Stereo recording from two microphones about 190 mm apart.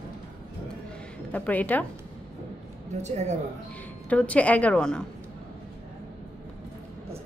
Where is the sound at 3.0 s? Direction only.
35° right (ahead or behind).